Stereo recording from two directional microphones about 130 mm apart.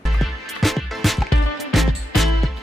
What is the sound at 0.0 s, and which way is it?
Music, centre (ahead or behind).